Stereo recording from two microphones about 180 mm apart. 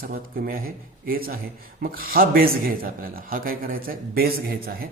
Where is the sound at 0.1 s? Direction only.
50° right (ahead or behind).